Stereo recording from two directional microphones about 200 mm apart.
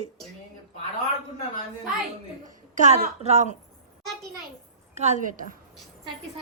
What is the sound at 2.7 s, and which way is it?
Speech, 40° right (ahead or behind).